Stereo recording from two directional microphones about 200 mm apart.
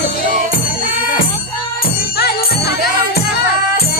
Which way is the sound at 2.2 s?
50° left (ahead or behind).